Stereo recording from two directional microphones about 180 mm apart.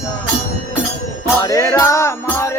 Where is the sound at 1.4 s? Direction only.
20° left (ahead or behind).